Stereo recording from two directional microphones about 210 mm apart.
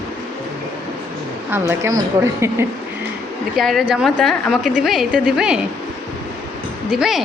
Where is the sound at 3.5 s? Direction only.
Centre (ahead or behind).